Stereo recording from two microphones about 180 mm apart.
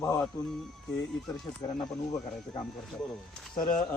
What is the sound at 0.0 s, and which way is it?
Speech, 20° left (ahead or behind).